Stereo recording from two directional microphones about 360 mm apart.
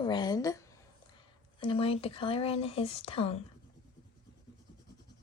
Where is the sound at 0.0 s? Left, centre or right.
Centre.